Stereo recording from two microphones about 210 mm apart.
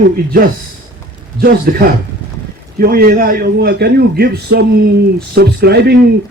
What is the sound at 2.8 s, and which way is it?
A man's voice, 45° right (ahead or behind).